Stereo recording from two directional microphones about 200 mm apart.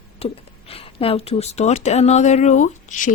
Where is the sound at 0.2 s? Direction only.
30° left (ahead or behind).